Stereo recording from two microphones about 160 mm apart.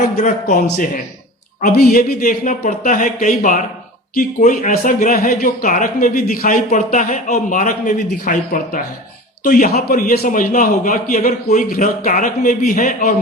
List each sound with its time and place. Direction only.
0.2 s a man's voice: 50° left (ahead or behind)
1.7 s speech: 70° left (ahead or behind)